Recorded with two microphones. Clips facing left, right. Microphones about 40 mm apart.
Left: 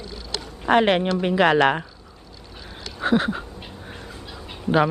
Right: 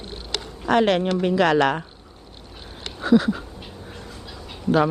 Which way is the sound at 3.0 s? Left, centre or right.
Left.